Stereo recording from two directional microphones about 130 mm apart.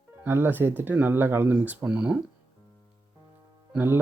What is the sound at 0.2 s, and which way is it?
Speech, 15° right (ahead or behind).